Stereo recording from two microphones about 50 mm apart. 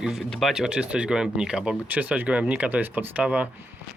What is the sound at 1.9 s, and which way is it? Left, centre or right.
Speech, right.